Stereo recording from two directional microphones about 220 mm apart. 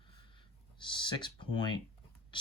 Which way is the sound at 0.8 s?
20° left (ahead or behind).